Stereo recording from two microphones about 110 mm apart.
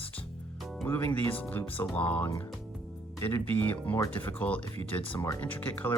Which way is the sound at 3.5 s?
15° left (ahead or behind).